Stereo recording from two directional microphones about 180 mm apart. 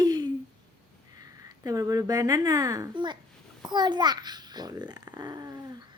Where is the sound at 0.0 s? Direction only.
20° right (ahead or behind).